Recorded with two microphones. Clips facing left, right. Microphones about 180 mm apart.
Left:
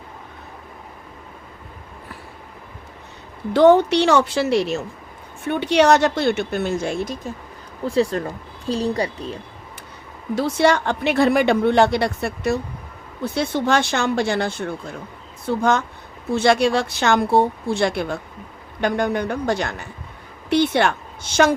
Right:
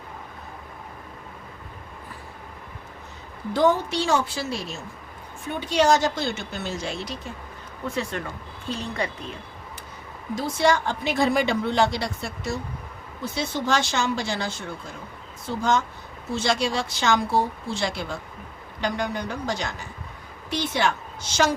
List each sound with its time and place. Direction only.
3.5 s a woman's voice: 70° left (ahead or behind); by 7.2 s 50° left (ahead or behind)
7.9 s speech: 35° left (ahead or behind)
10.3 s a woman's voice: 65° left (ahead or behind)